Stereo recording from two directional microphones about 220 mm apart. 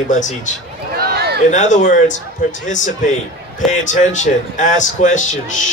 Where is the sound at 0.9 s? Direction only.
45° right (ahead or behind).